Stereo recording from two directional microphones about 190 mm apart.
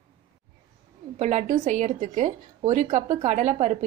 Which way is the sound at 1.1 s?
35° right (ahead or behind).